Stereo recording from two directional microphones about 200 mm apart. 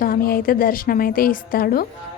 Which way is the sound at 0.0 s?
45° left (ahead or behind).